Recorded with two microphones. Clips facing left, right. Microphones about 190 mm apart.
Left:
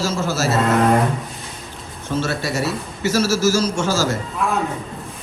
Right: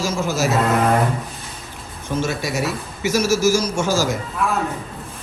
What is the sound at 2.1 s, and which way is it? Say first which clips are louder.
A man's voice: even; 15° right (ahead or behind).